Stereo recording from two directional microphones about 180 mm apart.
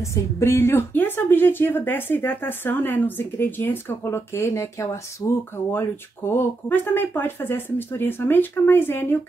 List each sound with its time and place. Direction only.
0.0 s a woman's voice: 15° left (ahead or behind)